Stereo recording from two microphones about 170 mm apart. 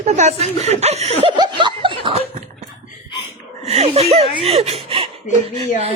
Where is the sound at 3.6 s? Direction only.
35° right (ahead or behind).